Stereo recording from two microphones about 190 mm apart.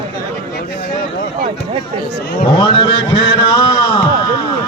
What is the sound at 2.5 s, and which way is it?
A man's voice, 25° left (ahead or behind).